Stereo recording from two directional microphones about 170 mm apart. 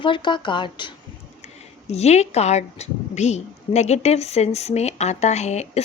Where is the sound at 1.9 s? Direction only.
40° left (ahead or behind).